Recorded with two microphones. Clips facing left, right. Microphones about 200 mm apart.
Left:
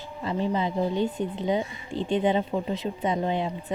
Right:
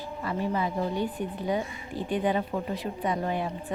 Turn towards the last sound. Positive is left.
turn(degrees=20)  # may be behind; listen again after turning